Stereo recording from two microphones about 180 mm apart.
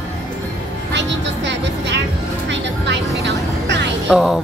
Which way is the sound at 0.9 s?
75° right (ahead or behind).